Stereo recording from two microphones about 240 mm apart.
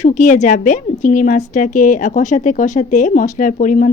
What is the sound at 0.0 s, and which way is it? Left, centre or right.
Speech, left.